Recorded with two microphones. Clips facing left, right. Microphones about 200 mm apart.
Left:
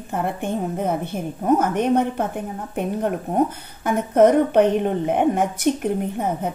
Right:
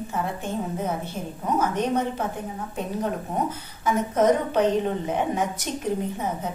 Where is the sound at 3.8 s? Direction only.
60° left (ahead or behind).